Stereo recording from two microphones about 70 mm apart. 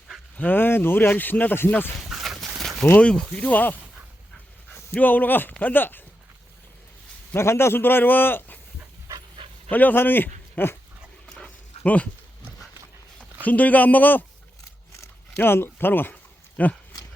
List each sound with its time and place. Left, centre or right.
0.3 s speech: left
2.0 s livestock: centre
2.6 s a sound: centre
3.0 s speech: centre
4.9 s speech: left
7.3 s a man's voice: left
9.6 s speech: left
11.3 s dog: centre
13.4 s speech: left
15.4 s a man's voice: left